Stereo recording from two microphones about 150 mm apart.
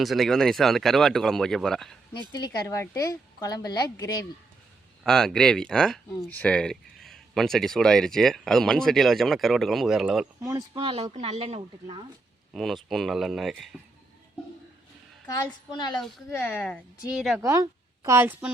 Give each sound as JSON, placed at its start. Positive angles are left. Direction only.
{"t": 0.0, "sound": "speech", "side_deg": 0}
{"t": 2.6, "sound": "a woman's voice", "side_deg": 20}
{"t": 5.0, "sound": "speech", "side_deg": 5}
{"t": 10.4, "sound": "speech", "side_deg": -25}
{"t": 11.1, "sound": "speech", "side_deg": -45}
{"t": 12.5, "sound": "speech", "side_deg": 0}
{"t": 15.7, "sound": "a woman's voice", "side_deg": 30}
{"t": 16.3, "sound": "speech", "side_deg": 15}
{"t": 17.2, "sound": "speech", "side_deg": -5}
{"t": 17.4, "sound": "speech", "side_deg": -20}